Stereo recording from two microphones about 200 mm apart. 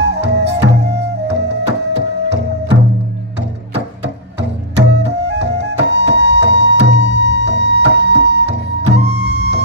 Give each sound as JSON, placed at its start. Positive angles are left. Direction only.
{"t": 0.0, "sound": "music", "side_deg": -60}
{"t": 4.0, "sound": "music", "side_deg": -60}